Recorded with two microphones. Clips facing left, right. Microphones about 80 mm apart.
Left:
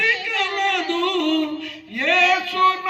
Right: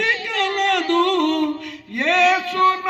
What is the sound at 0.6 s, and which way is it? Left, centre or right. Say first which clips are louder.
Music: right 2 dB; right.